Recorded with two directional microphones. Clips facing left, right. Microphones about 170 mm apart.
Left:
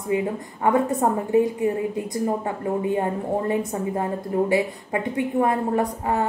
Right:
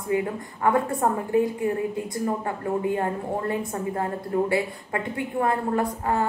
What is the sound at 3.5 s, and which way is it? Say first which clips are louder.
A woman's voice: left 3 dB; 20° left (ahead or behind).